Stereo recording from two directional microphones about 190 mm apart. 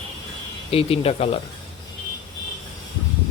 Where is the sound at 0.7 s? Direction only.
30° left (ahead or behind).